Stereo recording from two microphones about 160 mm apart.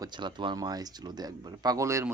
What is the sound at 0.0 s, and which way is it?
Speech, 30° right (ahead or behind).